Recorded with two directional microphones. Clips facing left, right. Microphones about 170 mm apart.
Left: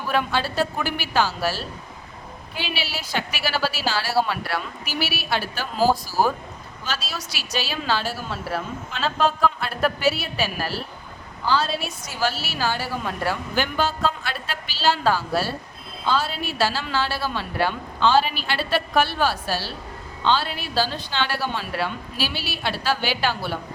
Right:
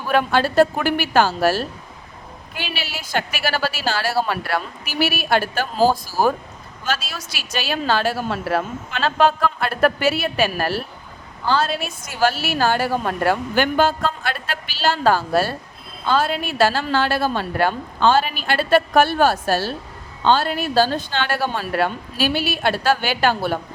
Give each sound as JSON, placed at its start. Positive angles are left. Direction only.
{"t": 0.1, "sound": "a woman's voice", "side_deg": -50}
{"t": 2.7, "sound": "a woman's voice", "side_deg": -50}